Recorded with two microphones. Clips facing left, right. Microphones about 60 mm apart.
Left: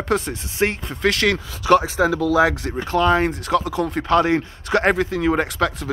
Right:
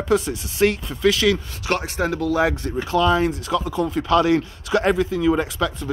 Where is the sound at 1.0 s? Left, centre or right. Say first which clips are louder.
Right 1 dB; left.